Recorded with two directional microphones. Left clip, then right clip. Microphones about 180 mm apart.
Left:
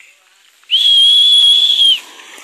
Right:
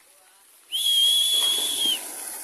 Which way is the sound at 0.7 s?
25° right (ahead or behind).